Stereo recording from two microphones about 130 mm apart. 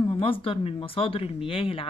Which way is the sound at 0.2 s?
45° left (ahead or behind).